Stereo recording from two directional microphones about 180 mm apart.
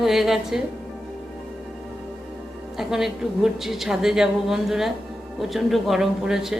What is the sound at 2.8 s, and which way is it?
A woman's voice, centre (ahead or behind).